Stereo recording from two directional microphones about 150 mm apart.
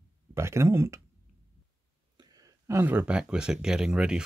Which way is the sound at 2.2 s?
20° right (ahead or behind).